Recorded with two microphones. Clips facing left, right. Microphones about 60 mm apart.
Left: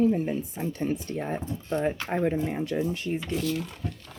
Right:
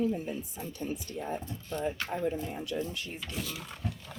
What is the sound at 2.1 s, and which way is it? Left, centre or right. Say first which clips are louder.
Speech: left 6 dB; left.